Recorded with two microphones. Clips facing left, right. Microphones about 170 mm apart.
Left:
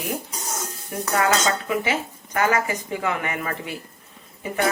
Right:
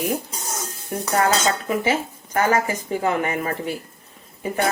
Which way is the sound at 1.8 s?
35° right (ahead or behind).